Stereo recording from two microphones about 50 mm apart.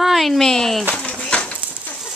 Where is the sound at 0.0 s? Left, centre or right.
Centre.